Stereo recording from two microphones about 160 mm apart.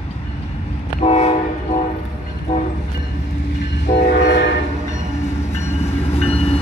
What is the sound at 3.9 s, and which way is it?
Train, 90° left.